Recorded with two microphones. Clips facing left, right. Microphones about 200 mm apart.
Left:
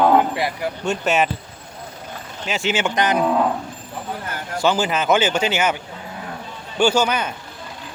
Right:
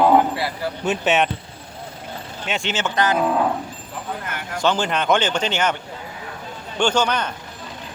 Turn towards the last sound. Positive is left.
turn(degrees=5)  # may be behind; listen again after turning